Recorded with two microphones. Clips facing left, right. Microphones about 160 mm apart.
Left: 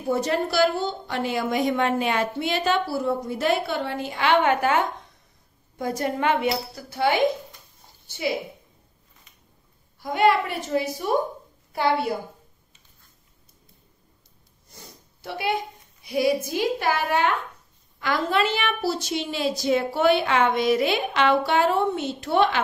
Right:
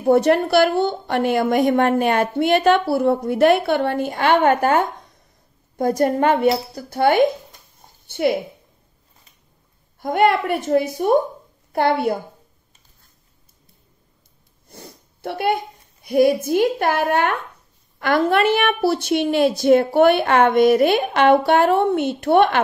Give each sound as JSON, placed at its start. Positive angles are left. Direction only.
{"t": 0.0, "sound": "a woman's voice", "side_deg": -60}
{"t": 9.9, "sound": "a woman's voice", "side_deg": -55}
{"t": 14.7, "sound": "a woman's voice", "side_deg": -55}